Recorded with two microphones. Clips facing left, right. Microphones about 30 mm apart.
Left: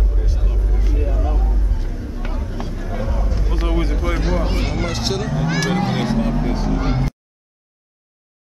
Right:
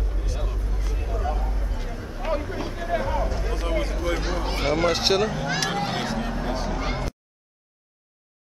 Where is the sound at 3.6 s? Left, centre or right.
Centre.